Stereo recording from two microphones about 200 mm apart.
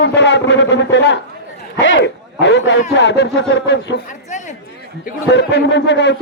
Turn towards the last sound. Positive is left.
turn(degrees=60)  # may be behind; listen again after turning